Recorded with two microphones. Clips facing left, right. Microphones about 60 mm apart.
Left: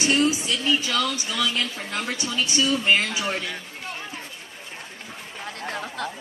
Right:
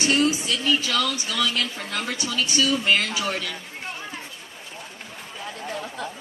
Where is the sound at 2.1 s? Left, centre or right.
Left.